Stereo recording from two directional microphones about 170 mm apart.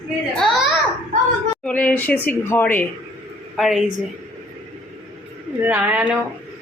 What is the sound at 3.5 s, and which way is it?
Speech, centre (ahead or behind).